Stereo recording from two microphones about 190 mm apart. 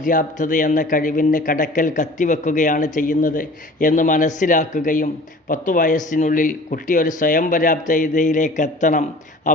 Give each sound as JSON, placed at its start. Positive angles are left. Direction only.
{"t": 0.0, "sound": "speech", "side_deg": 45}